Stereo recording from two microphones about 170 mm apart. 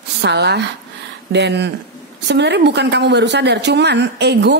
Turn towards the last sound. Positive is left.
turn(degrees=-85)